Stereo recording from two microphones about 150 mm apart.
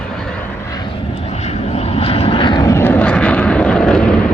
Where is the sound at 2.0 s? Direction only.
40° left (ahead or behind).